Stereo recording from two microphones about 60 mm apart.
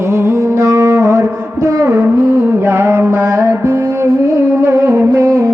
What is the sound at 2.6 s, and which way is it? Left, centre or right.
Mantra, right.